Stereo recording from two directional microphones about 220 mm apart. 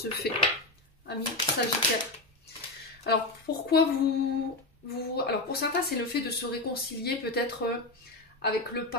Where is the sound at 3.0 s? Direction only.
45° left (ahead or behind).